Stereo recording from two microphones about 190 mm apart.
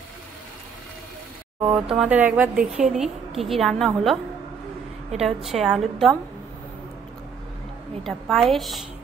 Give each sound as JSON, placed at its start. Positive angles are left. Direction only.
{"t": 1.6, "sound": "speech", "side_deg": -30}
{"t": 2.0, "sound": "a woman's voice", "side_deg": -10}
{"t": 5.2, "sound": "a woman's voice", "side_deg": 0}
{"t": 8.0, "sound": "a woman's voice", "side_deg": 0}